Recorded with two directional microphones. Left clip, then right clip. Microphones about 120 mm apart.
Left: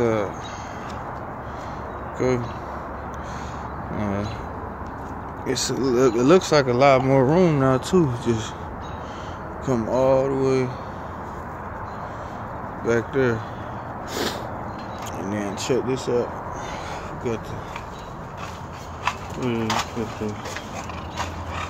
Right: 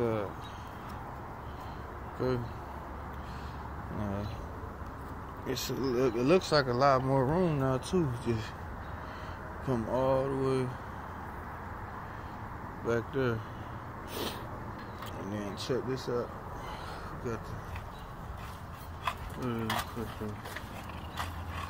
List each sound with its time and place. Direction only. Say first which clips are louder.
0.0 s a sound: left 10 dB; 10° left (ahead or behind)
2.1 s speech: left 10 dB; 5° left (ahead or behind)
5.5 s speech: left 10 dB; 15° left (ahead or behind)
5.9 s speech: left 10 dB; 25° left (ahead or behind)
9.7 s speech: left 10 dB; 5° right (ahead or behind)
12.8 s speech: left 10 dB; 10° left (ahead or behind)
15.2 s speech: left 11 dB; 15° left (ahead or behind)